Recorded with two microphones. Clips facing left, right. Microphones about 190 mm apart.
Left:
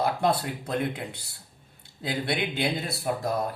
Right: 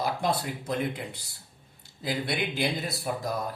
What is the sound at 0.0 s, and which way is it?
Speech, 60° left (ahead or behind).